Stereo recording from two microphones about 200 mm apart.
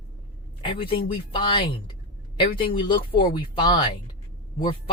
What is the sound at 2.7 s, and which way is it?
Speech, 25° left (ahead or behind).